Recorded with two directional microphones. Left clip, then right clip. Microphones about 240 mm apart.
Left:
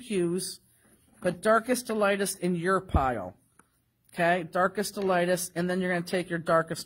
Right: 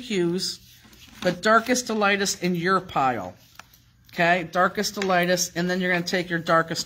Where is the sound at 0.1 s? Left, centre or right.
Left.